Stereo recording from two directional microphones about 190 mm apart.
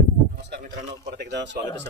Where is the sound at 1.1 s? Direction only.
65° right (ahead or behind).